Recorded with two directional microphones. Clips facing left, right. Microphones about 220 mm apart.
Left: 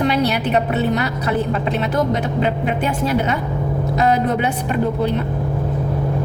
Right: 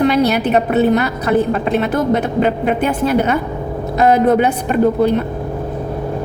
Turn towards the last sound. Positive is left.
turn(degrees=-45)  # may be behind; listen again after turning